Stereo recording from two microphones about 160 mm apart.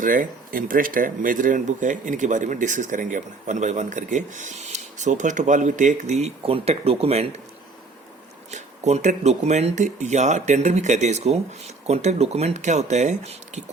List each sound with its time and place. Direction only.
0.0 s speech: 55° right (ahead or behind); by 7.4 s 40° right (ahead or behind)
8.4 s speech: 45° right (ahead or behind)